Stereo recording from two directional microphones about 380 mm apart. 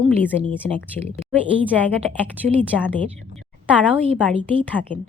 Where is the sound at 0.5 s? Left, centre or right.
Centre.